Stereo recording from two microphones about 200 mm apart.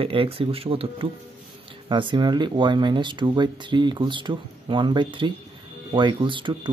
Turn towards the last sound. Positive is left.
turn(degrees=-25)  # may be behind; listen again after turning